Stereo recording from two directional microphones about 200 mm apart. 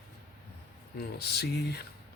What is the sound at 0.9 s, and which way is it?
Speech, 55° left (ahead or behind).